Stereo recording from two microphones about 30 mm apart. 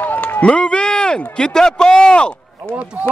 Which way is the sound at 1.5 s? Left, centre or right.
Left.